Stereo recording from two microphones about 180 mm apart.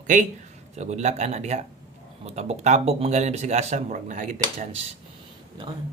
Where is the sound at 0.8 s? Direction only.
40° right (ahead or behind).